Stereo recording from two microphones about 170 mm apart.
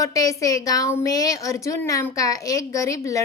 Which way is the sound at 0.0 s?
20° left (ahead or behind).